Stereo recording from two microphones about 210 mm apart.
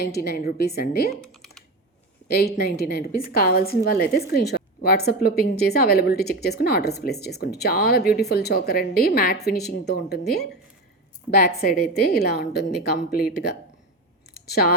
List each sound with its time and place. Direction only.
0.1 s a woman's voice: 45° left (ahead or behind)
1.1 s computer keyboard: centre (ahead or behind)
2.2 s a woman's voice: 50° left (ahead or behind)
14.3 s a sound: 50° left (ahead or behind)